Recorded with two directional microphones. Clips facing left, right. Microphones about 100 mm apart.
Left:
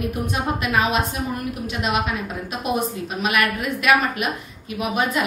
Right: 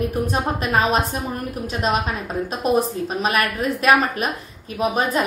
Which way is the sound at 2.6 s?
35° right (ahead or behind).